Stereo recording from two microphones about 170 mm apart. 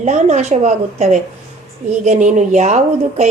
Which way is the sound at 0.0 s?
45° right (ahead or behind).